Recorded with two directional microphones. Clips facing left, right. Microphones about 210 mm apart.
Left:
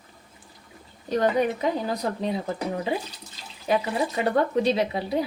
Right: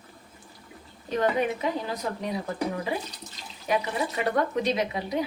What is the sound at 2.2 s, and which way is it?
Speech, 25° left (ahead or behind).